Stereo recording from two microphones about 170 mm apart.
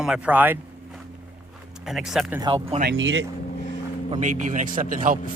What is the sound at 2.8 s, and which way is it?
Speech, 80° right.